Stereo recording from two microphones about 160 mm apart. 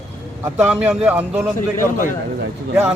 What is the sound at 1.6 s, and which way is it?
Speech, 55° left (ahead or behind).